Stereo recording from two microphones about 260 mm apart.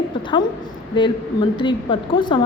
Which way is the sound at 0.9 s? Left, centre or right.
Centre.